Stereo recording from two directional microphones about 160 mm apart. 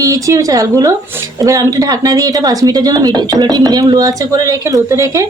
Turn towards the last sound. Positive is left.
turn(degrees=-20)  # may be behind; listen again after turning